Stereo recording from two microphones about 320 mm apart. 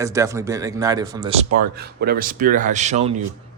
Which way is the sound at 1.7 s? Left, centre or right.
Right.